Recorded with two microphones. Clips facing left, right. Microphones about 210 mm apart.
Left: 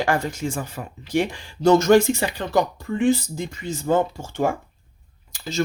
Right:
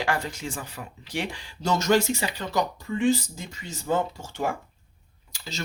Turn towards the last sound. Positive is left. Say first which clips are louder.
# left 7 dB
turn(degrees=50)  # may be behind; listen again after turning